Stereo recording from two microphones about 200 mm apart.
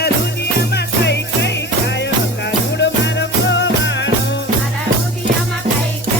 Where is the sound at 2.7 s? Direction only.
60° left (ahead or behind).